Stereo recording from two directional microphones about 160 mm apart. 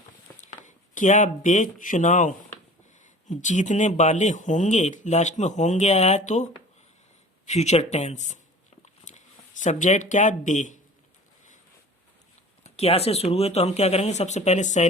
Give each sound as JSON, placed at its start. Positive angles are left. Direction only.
{"t": 0.4, "sound": "speech", "side_deg": 50}
{"t": 8.8, "sound": "a sound", "side_deg": 45}
{"t": 12.6, "sound": "speech", "side_deg": 40}